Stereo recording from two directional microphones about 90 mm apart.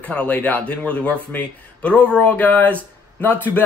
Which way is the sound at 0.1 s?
15° left (ahead or behind).